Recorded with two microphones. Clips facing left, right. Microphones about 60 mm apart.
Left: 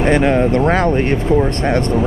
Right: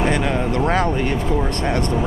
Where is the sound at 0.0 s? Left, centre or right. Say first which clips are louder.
Left 6 dB; left.